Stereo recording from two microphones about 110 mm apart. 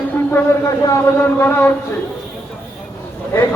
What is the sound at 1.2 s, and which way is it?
Speech, 15° left (ahead or behind).